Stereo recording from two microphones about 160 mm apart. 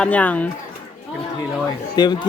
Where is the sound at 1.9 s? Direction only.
25° left (ahead or behind).